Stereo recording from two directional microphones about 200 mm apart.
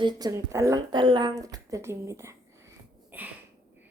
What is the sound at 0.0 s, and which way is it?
Speech, 20° right (ahead or behind).